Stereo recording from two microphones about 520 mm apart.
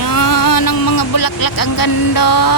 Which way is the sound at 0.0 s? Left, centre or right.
Left.